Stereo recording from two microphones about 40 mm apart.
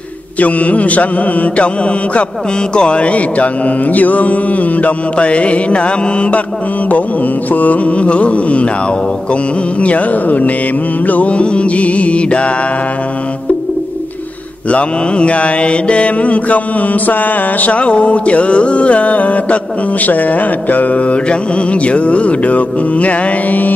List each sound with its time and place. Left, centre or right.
0.4 s mantra: left
7.5 s mantra: left
11.3 s mantra: left
14.7 s mantra: left